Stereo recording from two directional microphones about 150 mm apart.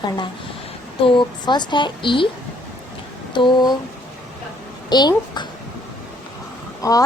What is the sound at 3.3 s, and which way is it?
Speech, 30° left (ahead or behind).